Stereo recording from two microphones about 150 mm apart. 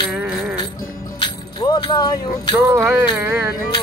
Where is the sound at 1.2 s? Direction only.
30° left (ahead or behind).